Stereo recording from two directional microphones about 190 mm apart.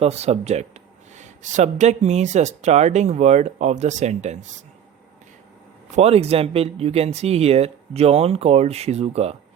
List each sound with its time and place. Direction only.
0.0 s speech: 35° right (ahead or behind)
6.0 s speech: 35° right (ahead or behind)